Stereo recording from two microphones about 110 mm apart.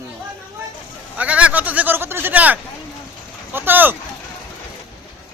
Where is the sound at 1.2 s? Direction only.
10° right (ahead or behind).